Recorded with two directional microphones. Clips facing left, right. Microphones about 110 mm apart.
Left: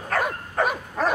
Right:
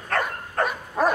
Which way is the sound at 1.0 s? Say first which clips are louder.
Right 3 dB; 10° right (ahead or behind).